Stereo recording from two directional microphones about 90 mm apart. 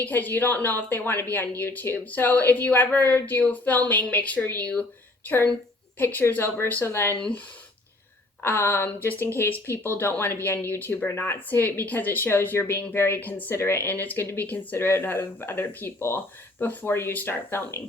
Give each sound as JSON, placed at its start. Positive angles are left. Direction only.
{"t": 0.0, "sound": "speech", "side_deg": 20}
{"t": 6.0, "sound": "speech", "side_deg": 20}
{"t": 8.4, "sound": "speech", "side_deg": 25}